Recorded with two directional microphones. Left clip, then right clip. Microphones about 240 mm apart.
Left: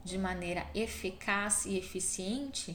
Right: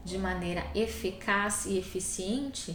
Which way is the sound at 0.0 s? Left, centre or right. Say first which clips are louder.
Right 3 dB; left.